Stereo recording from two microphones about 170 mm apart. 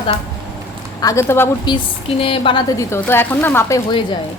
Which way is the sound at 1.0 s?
15° left (ahead or behind).